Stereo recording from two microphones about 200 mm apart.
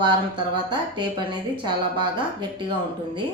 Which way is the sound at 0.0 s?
25° right (ahead or behind).